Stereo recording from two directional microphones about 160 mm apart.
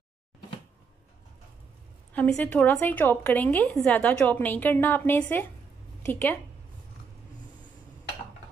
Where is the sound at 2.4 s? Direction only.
10° left (ahead or behind).